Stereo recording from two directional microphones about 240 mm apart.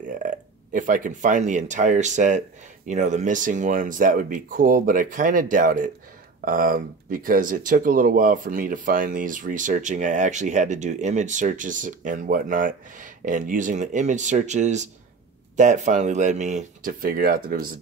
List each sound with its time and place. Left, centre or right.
0.0 s speech: right